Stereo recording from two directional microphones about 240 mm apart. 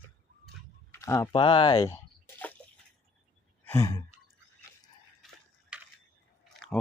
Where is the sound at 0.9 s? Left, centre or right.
Centre.